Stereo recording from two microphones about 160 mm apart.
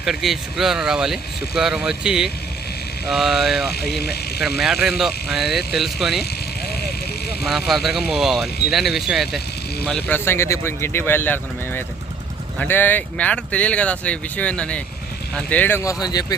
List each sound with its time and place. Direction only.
0.0 s speech: centre (ahead or behind)
3.8 s speech: 85° left
4.6 s speech: centre (ahead or behind)
7.4 s speech: centre (ahead or behind); by 16.2 s 25° left (ahead or behind)